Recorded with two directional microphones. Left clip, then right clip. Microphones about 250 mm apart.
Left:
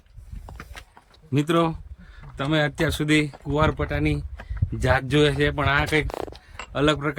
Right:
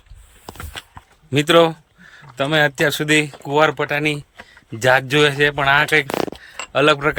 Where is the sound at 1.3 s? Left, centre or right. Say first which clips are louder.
Right 9 dB; centre.